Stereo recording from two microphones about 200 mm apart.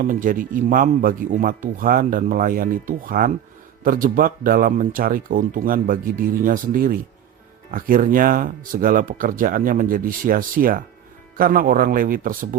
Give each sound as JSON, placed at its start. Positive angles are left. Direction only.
{"t": 0.0, "sound": "speech", "side_deg": -40}